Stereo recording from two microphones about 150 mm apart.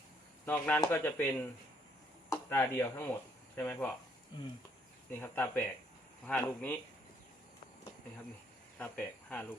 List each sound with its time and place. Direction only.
0.4 s speech: 10° left (ahead or behind)
5.1 s speech: 15° left (ahead or behind)
8.8 s speech: 10° left (ahead or behind)